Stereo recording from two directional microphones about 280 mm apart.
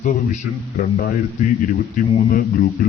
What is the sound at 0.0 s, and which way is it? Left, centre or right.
Speech, left.